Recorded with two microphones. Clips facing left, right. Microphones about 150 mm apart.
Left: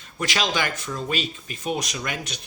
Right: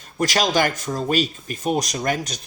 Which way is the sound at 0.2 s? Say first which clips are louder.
Right 6 dB; 45° right (ahead or behind).